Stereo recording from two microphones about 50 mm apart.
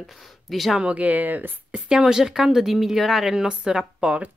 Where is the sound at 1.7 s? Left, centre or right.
Centre.